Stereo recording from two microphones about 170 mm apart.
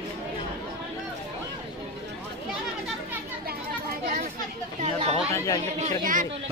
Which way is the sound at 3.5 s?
55° right (ahead or behind).